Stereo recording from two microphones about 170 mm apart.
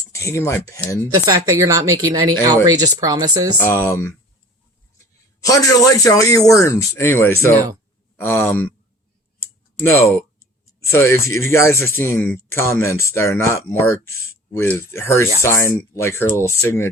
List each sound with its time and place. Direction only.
0.1 s speech: 15° left (ahead or behind)
1.1 s a woman's voice: 20° right (ahead or behind)
3.6 s speech: 15° left (ahead or behind)
5.4 s speech: 20° left (ahead or behind)
9.4 s a sound: 10° left (ahead or behind)
10.8 s speech: 15° left (ahead or behind)